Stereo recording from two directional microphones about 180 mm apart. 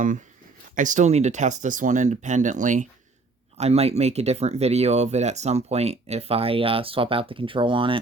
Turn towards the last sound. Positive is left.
turn(degrees=-30)  # may be behind; listen again after turning